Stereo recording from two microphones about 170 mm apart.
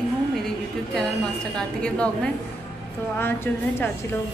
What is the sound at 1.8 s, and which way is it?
A woman's voice, 5° left (ahead or behind).